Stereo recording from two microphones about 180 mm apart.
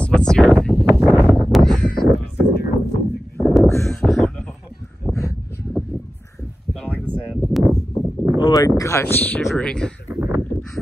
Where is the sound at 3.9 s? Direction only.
Centre (ahead or behind).